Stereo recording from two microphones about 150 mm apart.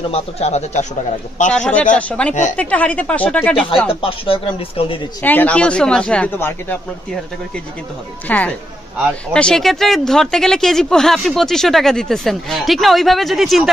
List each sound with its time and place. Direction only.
0.1 s speech: 45° left (ahead or behind)
1.5 s speech: 10° left (ahead or behind)
3.9 s speech: 35° left (ahead or behind)
5.2 s speech: 10° left (ahead or behind)
8.3 s speech: 10° left (ahead or behind)